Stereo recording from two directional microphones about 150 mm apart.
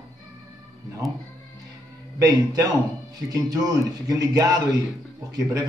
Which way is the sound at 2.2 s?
25° right (ahead or behind).